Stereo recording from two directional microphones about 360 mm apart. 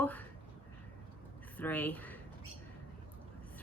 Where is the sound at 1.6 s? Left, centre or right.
Centre.